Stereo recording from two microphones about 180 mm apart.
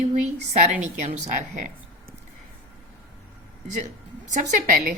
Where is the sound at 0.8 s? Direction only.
40° right (ahead or behind).